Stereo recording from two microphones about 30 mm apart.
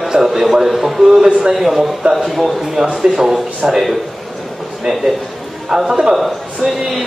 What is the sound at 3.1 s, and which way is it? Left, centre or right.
Speech, centre.